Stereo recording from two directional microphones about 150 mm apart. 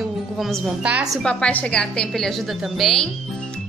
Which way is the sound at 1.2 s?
5° left (ahead or behind).